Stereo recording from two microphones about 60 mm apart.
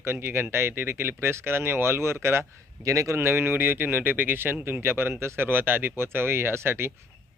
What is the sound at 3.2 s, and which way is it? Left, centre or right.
Speech, right.